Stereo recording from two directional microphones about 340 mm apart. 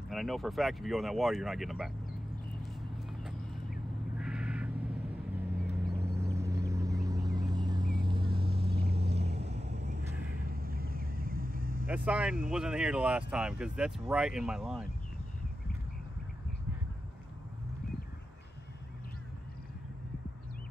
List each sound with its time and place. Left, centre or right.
0.1 s speech: centre
2.6 s vehicle: centre
4.2 s crow: centre
5.7 s vehicle: centre
9.0 s vehicle: right
11.9 s speech: centre